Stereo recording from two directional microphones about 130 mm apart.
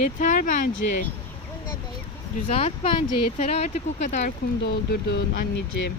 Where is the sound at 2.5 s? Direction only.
50° left (ahead or behind).